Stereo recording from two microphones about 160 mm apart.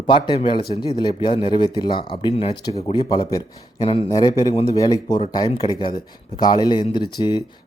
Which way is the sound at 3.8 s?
35° left (ahead or behind).